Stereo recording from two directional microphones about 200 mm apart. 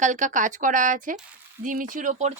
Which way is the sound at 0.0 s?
40° right (ahead or behind).